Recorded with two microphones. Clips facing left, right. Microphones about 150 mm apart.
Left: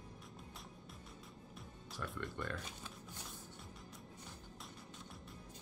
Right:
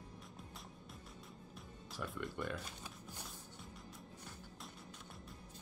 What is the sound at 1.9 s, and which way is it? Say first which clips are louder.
Music: right 1 dB; centre (ahead or behind).